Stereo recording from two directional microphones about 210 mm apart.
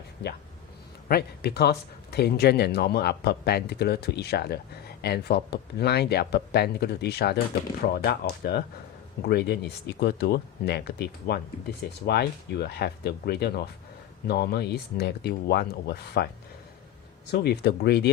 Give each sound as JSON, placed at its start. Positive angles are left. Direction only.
{"t": 1.0, "sound": "speech", "side_deg": 50}
{"t": 17.3, "sound": "speech", "side_deg": 50}